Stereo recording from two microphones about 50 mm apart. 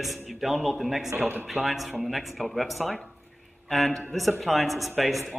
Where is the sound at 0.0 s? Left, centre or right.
Centre.